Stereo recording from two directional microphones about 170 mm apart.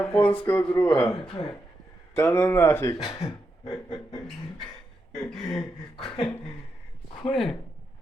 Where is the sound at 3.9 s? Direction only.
30° left (ahead or behind).